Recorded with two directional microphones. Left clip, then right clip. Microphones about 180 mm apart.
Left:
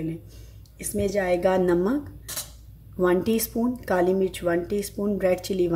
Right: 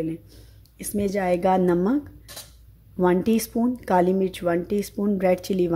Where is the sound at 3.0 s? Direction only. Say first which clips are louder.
Right 1 dB; 40° right (ahead or behind).